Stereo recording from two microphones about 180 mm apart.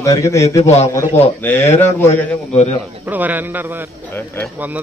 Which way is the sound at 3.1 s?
10° right (ahead or behind).